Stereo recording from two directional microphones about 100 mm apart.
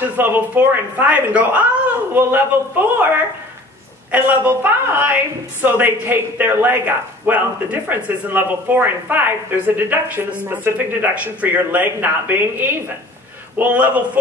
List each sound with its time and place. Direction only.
0.0 s a woman's voice: 20° right (ahead or behind)
4.1 s a woman's voice: 15° right (ahead or behind)